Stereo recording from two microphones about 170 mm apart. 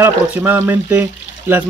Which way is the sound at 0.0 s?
15° right (ahead or behind).